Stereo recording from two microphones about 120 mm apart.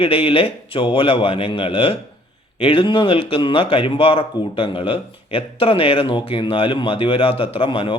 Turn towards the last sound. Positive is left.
turn(degrees=45)  # may be behind; listen again after turning